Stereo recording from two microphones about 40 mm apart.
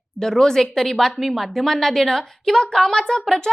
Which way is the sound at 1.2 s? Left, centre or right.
Centre.